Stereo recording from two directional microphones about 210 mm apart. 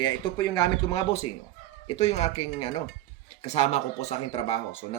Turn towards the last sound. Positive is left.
turn(degrees=30)  # may be behind; listen again after turning